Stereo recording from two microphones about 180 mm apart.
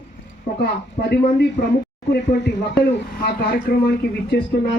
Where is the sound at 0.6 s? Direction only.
65° left (ahead or behind).